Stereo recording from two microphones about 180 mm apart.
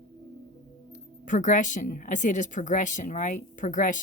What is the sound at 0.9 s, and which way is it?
Speech, 45° left (ahead or behind).